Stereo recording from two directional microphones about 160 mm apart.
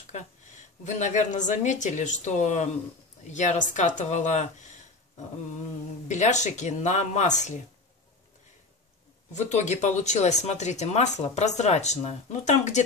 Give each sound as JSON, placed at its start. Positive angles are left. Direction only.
{"t": 0.8, "sound": "speech", "side_deg": 45}
{"t": 6.0, "sound": "speech", "side_deg": 45}
{"t": 9.3, "sound": "speech", "side_deg": 45}